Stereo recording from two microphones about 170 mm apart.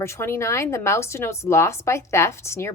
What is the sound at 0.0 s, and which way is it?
Speech, 15° left (ahead or behind).